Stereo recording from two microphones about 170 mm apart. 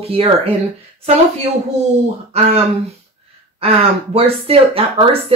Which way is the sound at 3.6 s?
35° right (ahead or behind).